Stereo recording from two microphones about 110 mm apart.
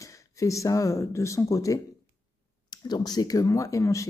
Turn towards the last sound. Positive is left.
turn(degrees=30)  # may be behind; listen again after turning